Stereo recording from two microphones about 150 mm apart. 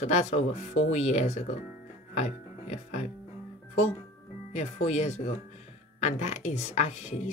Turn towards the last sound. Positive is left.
turn(degrees=45)  # may be behind; listen again after turning